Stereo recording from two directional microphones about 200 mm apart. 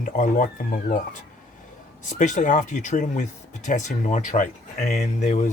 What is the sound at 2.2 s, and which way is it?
Speech, 40° left (ahead or behind).